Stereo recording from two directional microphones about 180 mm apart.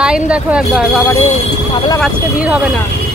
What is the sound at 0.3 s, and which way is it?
Speech, 5° right (ahead or behind).